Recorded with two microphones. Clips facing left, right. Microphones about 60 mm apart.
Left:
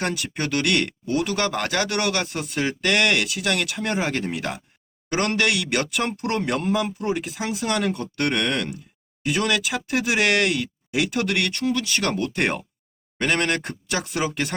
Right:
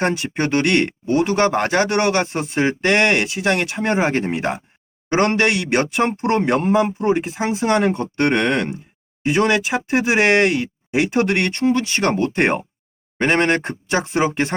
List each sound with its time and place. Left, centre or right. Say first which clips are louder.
0.0 s speech: right 6 dB; right